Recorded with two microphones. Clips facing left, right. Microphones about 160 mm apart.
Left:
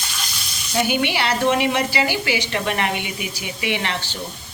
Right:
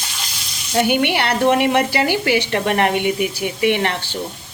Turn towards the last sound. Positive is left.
turn(degrees=-55)  # may be behind; listen again after turning